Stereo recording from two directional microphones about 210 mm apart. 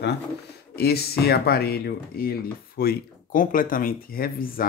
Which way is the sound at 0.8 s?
50° left (ahead or behind).